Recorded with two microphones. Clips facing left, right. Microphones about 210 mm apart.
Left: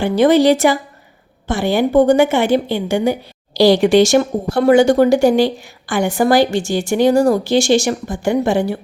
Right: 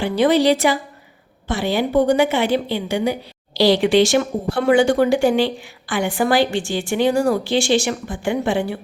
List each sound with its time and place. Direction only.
0.0 s a woman's voice: 45° left (ahead or behind)